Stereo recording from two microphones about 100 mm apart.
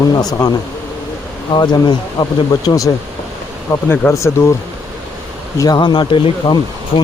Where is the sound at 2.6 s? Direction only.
35° left (ahead or behind).